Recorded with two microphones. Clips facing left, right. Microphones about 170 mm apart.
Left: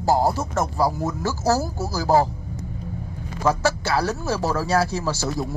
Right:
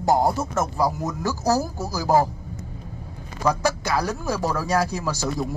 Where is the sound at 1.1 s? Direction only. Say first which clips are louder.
Left 1 dB; 15° right (ahead or behind).